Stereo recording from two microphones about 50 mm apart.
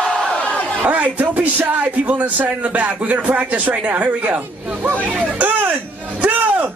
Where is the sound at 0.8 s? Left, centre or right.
Right.